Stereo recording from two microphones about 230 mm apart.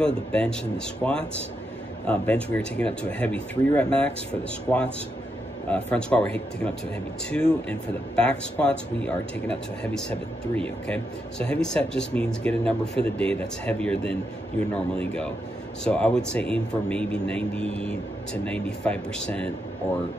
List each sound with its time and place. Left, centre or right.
0.0 s speech: centre